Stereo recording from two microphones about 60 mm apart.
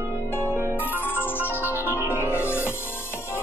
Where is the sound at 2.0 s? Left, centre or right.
Right.